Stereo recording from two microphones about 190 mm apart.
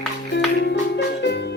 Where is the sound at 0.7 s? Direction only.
65° left (ahead or behind).